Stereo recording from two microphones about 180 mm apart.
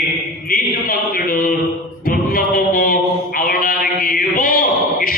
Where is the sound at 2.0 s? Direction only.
55° left (ahead or behind).